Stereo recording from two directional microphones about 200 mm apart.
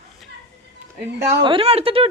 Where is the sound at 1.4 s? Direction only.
30° right (ahead or behind).